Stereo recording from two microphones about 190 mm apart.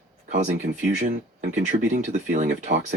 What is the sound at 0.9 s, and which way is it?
Speech, 55° right (ahead or behind).